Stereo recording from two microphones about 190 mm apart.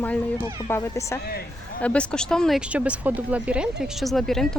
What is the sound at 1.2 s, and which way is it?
Speech, 55° left (ahead or behind).